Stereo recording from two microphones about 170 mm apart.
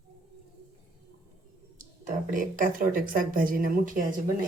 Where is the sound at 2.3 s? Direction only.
50° right (ahead or behind).